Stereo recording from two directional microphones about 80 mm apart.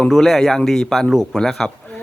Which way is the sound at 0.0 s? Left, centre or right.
Centre.